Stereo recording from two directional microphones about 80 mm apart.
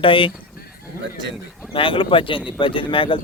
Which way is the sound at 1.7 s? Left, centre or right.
Left.